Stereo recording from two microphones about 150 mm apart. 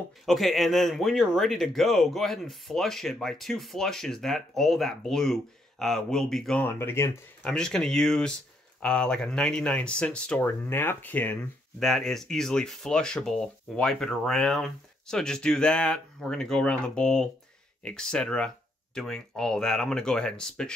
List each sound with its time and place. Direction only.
0.2 s speech: centre (ahead or behind)
6.6 s speech: 15° left (ahead or behind)
7.4 s speech: 5° left (ahead or behind)